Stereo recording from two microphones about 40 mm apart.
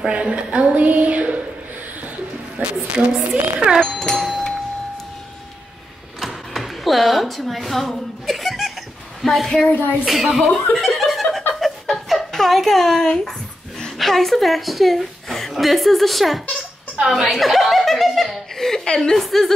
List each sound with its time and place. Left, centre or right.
0.1 s a woman's voice: right
0.8 s a sound: right
2.5 s a woman's voice: right
3.8 s a woman's voice: centre
4.3 s a sound: centre
6.1 s a sound: centre
8.3 s laughter: centre
9.2 s speech: centre
9.7 s speech: left
10.0 s speech: centre
11.0 s chuckle: centre
12.4 s speech: centre
17.1 s chuckle: centre
18.9 s a woman's voice: centre